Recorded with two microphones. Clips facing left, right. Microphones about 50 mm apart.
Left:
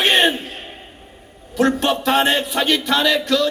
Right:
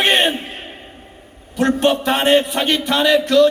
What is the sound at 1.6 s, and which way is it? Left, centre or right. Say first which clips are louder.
A man's voice: right 2 dB; right.